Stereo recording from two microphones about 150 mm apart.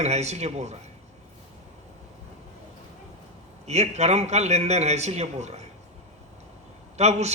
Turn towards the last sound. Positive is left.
turn(degrees=-50)  # may be behind; listen again after turning